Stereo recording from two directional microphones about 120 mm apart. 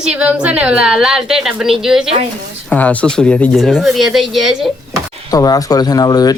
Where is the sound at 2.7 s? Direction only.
10° left (ahead or behind).